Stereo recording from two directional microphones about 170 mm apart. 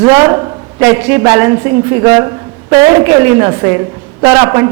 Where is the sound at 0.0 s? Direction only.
20° right (ahead or behind).